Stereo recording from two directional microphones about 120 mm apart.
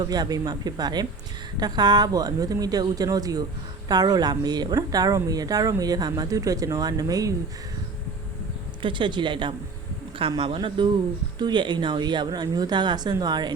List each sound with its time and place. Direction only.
0.0 s speech: 35° right (ahead or behind)
8.8 s speech: 40° right (ahead or behind)